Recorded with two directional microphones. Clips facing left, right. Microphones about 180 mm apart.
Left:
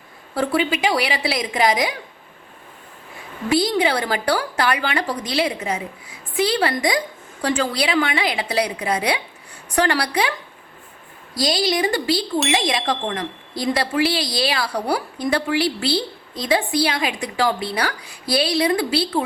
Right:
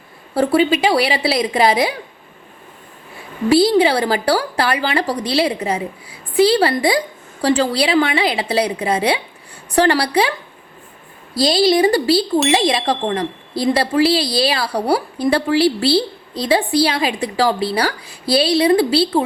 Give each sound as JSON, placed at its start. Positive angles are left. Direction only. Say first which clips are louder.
{"t": 0.3, "sound": "speech", "louder": "right 6 dB", "side_deg": -35}
{"t": 3.5, "sound": "a woman's voice", "louder": "right 6 dB", "side_deg": -30}
{"t": 11.4, "sound": "speech", "louder": "right 7 dB", "side_deg": -30}